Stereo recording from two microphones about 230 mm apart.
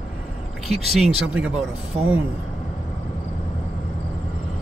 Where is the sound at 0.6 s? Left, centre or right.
Centre.